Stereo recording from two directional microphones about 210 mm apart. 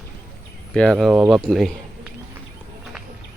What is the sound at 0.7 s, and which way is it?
Speech, 5° left (ahead or behind).